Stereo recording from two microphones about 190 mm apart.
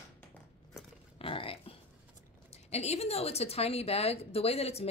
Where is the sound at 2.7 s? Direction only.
35° left (ahead or behind).